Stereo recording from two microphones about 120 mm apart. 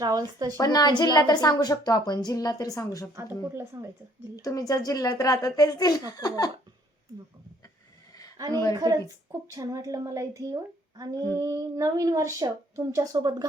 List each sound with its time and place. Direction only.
0.0 s speech: 30° right (ahead or behind)
0.6 s a woman's voice: 35° left (ahead or behind)
3.5 s speech: 20° right (ahead or behind)
4.4 s a woman's voice: 30° left (ahead or behind)
8.7 s speech: 35° right (ahead or behind)